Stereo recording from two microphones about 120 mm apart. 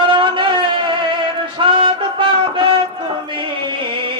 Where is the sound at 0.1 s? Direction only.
45° right (ahead or behind).